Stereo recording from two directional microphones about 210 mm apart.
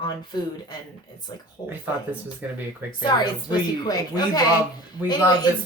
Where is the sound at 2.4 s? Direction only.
5° right (ahead or behind).